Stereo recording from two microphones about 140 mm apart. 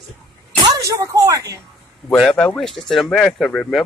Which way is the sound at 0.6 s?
25° right (ahead or behind).